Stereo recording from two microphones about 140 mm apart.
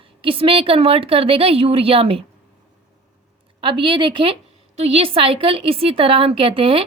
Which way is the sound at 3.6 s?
35° right (ahead or behind).